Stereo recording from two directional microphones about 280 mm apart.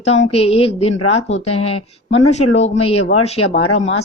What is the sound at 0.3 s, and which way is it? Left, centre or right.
A woman's voice, left.